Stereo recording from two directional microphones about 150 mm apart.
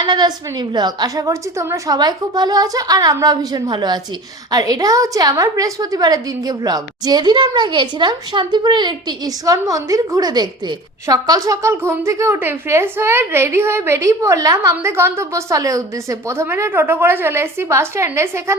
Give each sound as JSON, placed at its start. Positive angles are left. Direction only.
{"t": 0.0, "sound": "a woman's voice", "side_deg": -30}